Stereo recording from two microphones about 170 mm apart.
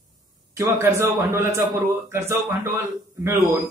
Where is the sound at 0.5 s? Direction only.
15° right (ahead or behind).